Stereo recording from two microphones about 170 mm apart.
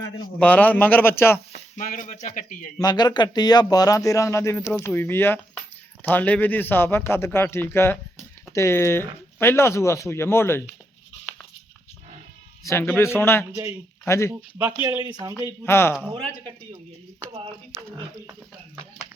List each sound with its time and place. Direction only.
0.3 s speech: 10° left (ahead or behind)
1.7 s speech: 50° left (ahead or behind)
2.7 s speech: 25° left (ahead or behind)
12.6 s speech: 15° left (ahead or behind)
14.6 s speech: 15° right (ahead or behind)
15.6 s speech: 15° left (ahead or behind)
16.1 s a man's voice: 35° right (ahead or behind)